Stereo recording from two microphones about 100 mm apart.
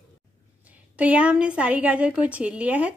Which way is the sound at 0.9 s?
15° right (ahead or behind).